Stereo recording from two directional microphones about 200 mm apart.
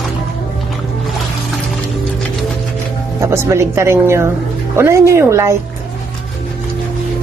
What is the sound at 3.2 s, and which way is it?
Speech, 15° right (ahead or behind).